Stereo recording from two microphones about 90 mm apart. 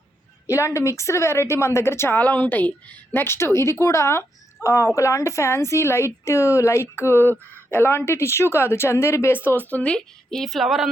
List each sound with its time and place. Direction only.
0.4 s a woman's voice: 30° left (ahead or behind); by 10.8 s centre (ahead or behind)